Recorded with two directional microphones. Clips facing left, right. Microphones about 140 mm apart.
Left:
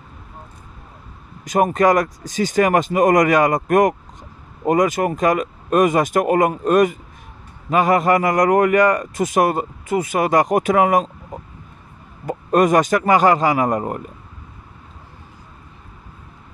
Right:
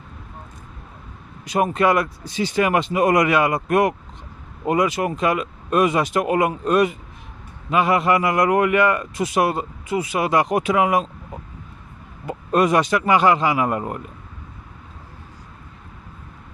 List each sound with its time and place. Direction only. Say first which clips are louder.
1.4 s a man's voice: left 3 dB; 45° left (ahead or behind)
12.3 s a man's voice: left 3 dB; 45° left (ahead or behind)